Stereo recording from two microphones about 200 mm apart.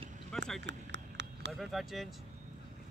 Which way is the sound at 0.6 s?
60° right (ahead or behind).